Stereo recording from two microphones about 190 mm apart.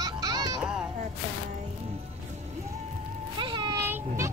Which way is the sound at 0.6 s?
5° right (ahead or behind).